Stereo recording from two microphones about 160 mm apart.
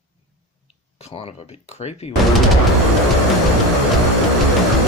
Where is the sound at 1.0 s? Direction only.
40° left (ahead or behind).